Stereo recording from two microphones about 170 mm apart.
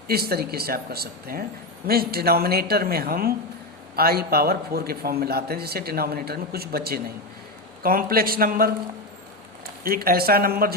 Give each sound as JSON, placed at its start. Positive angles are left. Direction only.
{"t": 0.1, "sound": "a man's voice", "side_deg": -65}
{"t": 9.8, "sound": "a man's voice", "side_deg": -60}